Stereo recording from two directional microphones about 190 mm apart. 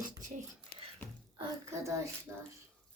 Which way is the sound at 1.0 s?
10° left (ahead or behind).